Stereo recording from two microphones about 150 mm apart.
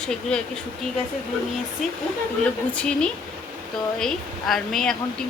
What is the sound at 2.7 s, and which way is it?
A woman's voice, 5° left (ahead or behind).